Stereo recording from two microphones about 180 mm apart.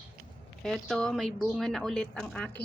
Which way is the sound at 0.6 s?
5° left (ahead or behind).